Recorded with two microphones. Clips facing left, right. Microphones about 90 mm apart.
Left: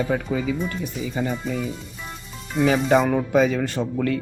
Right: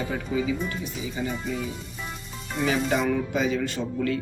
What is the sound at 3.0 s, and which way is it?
Speech, 50° left (ahead or behind).